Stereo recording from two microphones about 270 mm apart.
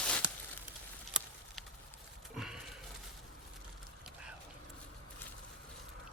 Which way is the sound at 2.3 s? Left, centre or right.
Centre.